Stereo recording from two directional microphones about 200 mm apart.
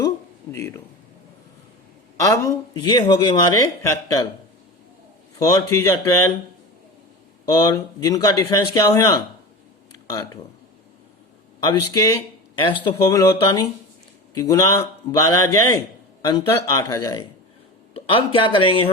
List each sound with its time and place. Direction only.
2.1 s speech: 15° left (ahead or behind)
5.5 s speech: 15° left (ahead or behind)
7.4 s speech: 20° left (ahead or behind)
11.6 s speech: 20° left (ahead or behind)